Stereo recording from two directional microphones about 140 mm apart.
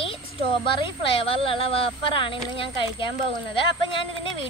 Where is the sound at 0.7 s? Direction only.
40° left (ahead or behind).